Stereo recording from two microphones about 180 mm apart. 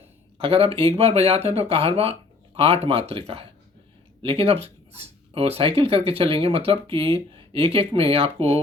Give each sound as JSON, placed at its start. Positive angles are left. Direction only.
{"t": 0.3, "sound": "speech", "side_deg": -30}